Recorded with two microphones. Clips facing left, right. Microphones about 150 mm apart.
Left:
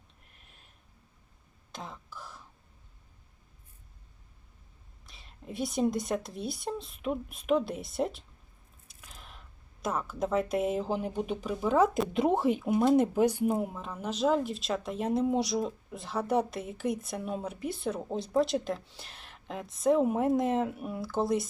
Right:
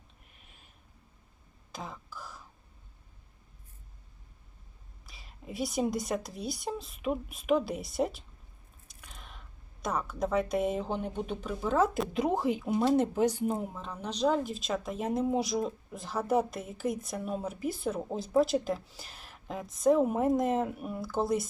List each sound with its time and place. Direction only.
0.3 s a sound: centre (ahead or behind)
1.7 s throat clearing: centre (ahead or behind)
5.0 s speech: centre (ahead or behind)
9.0 s a sound: centre (ahead or behind)
9.8 s speech: 5° left (ahead or behind)
12.1 s speech: 25° left (ahead or behind)
12.8 s speech: 15° left (ahead or behind)